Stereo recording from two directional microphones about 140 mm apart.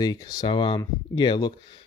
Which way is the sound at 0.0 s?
30° left (ahead or behind).